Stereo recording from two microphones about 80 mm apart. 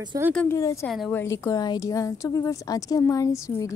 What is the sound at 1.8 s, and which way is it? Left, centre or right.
A woman's voice, left.